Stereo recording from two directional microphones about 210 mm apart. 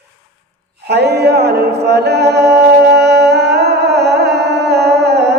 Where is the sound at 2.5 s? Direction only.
50° right (ahead or behind).